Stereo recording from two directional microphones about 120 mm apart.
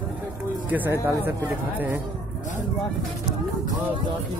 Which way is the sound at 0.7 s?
20° right (ahead or behind).